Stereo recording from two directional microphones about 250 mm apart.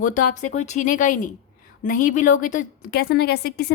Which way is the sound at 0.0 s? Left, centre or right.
Left.